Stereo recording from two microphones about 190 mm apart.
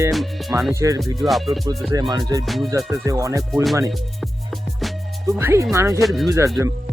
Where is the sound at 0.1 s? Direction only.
Centre (ahead or behind).